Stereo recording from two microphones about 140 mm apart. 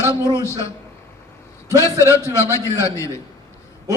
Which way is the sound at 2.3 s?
25° right (ahead or behind).